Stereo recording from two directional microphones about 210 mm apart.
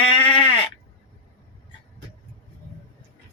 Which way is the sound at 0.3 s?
25° left (ahead or behind).